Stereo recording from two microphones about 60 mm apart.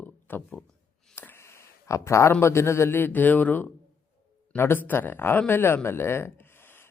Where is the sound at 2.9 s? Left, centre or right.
Left.